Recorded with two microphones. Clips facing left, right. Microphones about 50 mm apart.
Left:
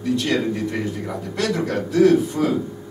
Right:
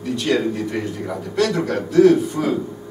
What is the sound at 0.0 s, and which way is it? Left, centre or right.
Speech, centre.